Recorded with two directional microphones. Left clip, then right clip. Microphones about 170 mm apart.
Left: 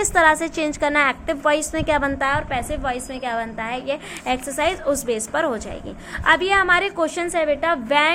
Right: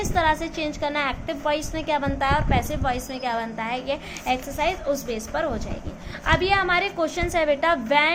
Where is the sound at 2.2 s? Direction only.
20° left (ahead or behind).